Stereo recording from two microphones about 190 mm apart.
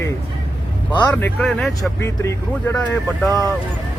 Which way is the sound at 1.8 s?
15° left (ahead or behind).